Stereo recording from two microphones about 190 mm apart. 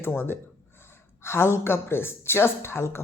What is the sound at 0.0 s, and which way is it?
Speech, 10° left (ahead or behind).